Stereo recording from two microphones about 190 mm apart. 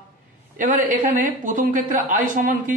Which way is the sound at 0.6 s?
45° right (ahead or behind).